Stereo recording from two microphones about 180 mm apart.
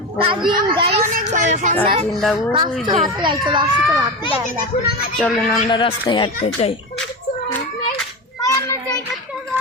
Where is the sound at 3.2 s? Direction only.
25° right (ahead or behind).